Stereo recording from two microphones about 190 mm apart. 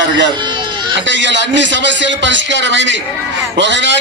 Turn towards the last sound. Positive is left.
turn(degrees=-70)  # may be behind; listen again after turning